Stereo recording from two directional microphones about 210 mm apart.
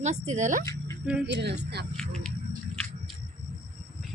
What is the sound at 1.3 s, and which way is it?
Speech, 55° right (ahead or behind).